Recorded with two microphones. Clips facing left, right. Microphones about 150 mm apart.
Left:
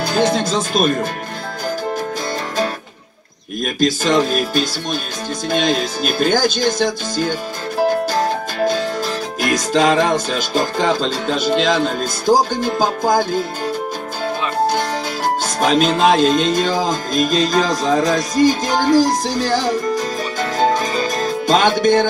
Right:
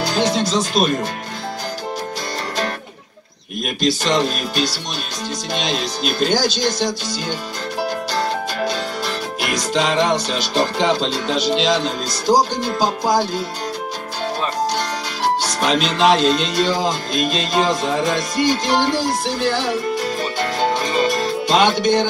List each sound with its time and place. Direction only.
0.0 s speech: 50° left (ahead or behind)
3.8 s music: 45° left (ahead or behind)
9.4 s music: 45° left (ahead or behind)
15.6 s music: 50° left (ahead or behind)
17.6 s speech: 40° left (ahead or behind)
21.5 s music: 45° left (ahead or behind)